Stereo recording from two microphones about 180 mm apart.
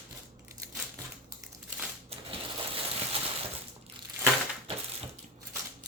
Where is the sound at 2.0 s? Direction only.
30° right (ahead or behind).